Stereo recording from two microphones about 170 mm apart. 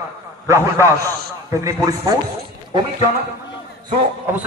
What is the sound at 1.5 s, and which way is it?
Speech, 20° right (ahead or behind).